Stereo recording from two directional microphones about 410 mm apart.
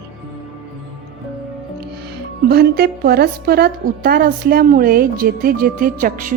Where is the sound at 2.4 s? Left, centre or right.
Right.